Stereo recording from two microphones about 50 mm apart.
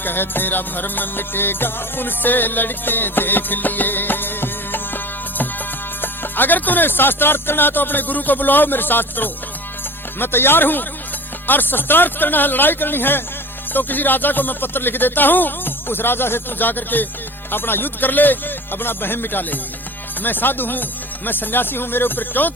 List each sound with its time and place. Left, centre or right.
0.0 s music: left
6.0 s music: left
10.2 s a man's voice: left
13.7 s music: left
17.5 s a man's voice: left
20.2 s music: left